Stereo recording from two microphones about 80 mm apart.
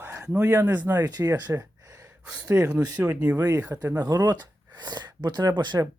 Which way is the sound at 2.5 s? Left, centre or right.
Right.